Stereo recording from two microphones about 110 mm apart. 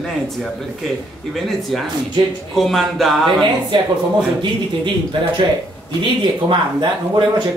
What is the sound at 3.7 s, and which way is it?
Speech, 45° right (ahead or behind).